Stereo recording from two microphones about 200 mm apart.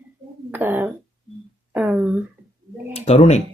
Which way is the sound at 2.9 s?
30° left (ahead or behind).